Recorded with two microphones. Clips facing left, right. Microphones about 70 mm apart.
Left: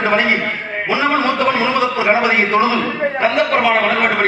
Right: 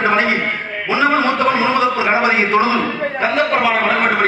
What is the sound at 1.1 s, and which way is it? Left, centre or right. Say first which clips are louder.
A man's voice: right 1 dB; right.